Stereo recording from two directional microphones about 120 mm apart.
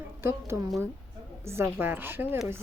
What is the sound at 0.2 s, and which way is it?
A woman's voice, 20° right (ahead or behind).